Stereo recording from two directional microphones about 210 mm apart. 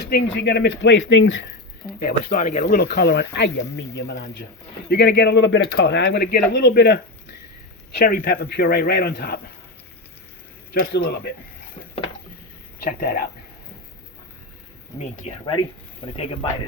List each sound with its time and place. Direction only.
0.0 s speech: 55° left (ahead or behind)
2.0 s speech: 40° left (ahead or behind); by 7.0 s 55° left (ahead or behind)
7.9 s speech: 45° left (ahead or behind)
10.8 s speech: 45° left (ahead or behind)
12.8 s speech: 45° left (ahead or behind)
14.9 s speech: 30° left (ahead or behind)